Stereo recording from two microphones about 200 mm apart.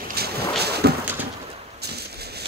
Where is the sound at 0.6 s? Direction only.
55° right (ahead or behind).